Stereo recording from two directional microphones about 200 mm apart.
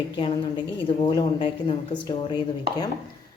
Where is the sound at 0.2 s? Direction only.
25° left (ahead or behind).